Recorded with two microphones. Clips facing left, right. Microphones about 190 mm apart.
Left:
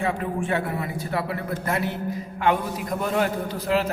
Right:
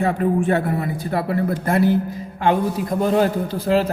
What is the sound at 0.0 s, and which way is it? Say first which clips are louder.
A man's voice: right 7 dB; 40° right (ahead or behind).